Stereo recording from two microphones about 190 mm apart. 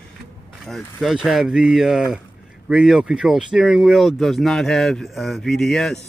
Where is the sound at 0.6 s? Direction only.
Centre (ahead or behind).